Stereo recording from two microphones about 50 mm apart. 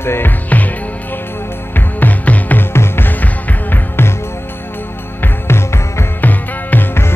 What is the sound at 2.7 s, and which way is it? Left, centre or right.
Music, left.